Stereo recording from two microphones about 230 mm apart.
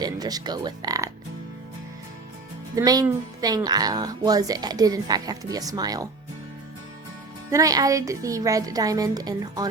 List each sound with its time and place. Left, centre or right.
0.0 s speech: centre
2.7 s a woman's voice: centre
7.5 s a woman's voice: centre